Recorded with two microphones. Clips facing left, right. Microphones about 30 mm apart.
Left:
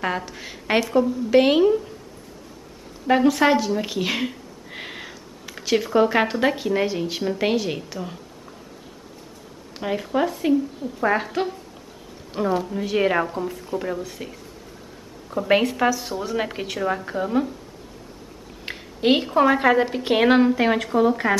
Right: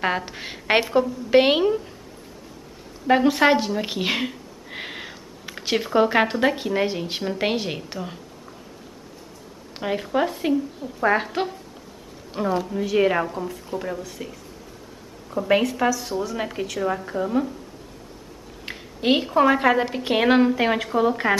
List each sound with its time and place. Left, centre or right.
0.0 s speech: right
3.3 s speech: right
4.3 s a sound: centre
5.6 s speech: right
5.9 s a woman's voice: centre
9.8 s a woman's voice: centre
14.0 s a woman's voice: centre
18.9 s a woman's voice: centre